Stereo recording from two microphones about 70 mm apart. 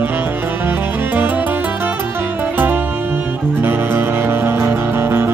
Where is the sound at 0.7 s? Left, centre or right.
Right.